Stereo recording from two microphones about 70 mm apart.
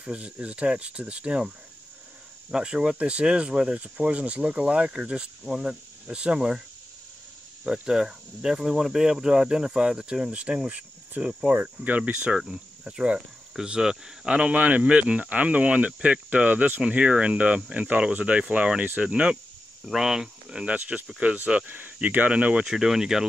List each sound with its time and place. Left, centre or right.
0.0 s speech: centre
2.5 s speech: centre
7.6 s speech: centre
19.9 s speech: centre